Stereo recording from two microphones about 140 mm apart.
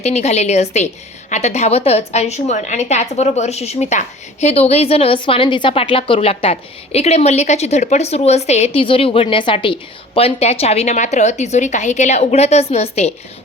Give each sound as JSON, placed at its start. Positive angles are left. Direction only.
{"t": 0.0, "sound": "a woman's voice", "side_deg": 50}